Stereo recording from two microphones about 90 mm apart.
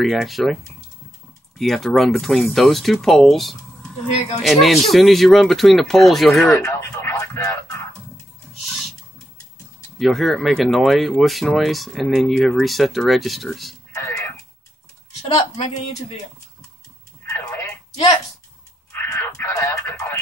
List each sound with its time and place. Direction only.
0.0 s speech: centre (ahead or behind)
1.6 s speech: 5° left (ahead or behind)
6.4 s radio: 30° left (ahead or behind)
8.5 s a sound: centre (ahead or behind)
9.9 s speech: centre (ahead or behind)
13.9 s a sound: 30° left (ahead or behind)
18.9 s radio: 30° left (ahead or behind)